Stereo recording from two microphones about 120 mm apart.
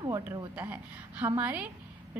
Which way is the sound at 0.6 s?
15° right (ahead or behind).